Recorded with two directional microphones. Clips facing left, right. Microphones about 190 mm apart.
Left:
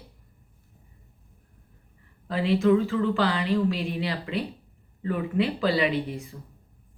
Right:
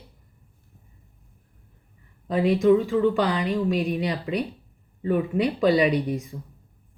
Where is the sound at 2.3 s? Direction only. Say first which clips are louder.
Right 3 dB; 20° right (ahead or behind).